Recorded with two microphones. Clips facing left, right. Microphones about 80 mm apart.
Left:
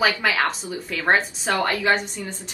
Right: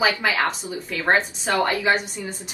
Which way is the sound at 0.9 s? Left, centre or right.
Centre.